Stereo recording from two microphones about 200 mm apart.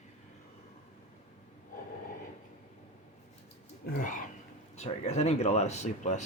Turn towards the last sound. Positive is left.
turn(degrees=35)  # may be behind; listen again after turning